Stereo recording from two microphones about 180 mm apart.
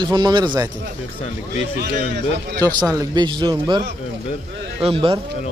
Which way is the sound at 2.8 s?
20° right (ahead or behind).